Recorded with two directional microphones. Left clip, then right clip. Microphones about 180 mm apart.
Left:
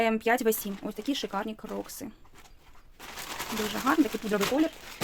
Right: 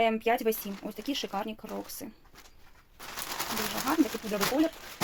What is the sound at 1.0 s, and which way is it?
Speech, 25° left (ahead or behind).